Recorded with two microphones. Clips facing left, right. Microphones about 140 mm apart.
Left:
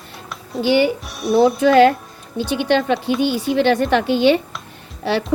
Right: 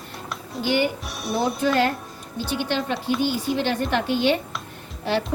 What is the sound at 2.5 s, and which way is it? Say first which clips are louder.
A woman's voice: left 8 dB; 70° left (ahead or behind).